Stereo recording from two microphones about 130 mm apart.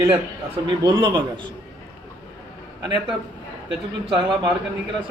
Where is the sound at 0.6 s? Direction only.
35° right (ahead or behind).